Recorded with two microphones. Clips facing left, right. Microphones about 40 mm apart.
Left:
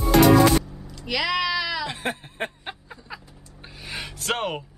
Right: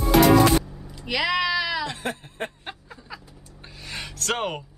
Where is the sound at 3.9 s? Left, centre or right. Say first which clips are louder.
Even; centre.